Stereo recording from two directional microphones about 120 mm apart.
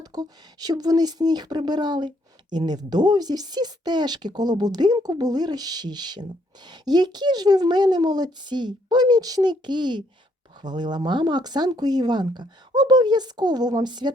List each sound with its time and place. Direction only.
0.0 s speech: 35° right (ahead or behind)